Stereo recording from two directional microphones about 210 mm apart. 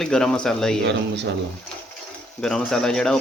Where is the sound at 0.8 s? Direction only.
55° right (ahead or behind).